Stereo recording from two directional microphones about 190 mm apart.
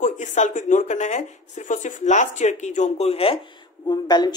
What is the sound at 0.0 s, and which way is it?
Speech, 40° left (ahead or behind).